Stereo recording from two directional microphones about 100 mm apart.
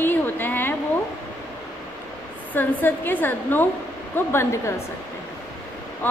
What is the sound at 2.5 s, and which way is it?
A woman's voice, 20° left (ahead or behind).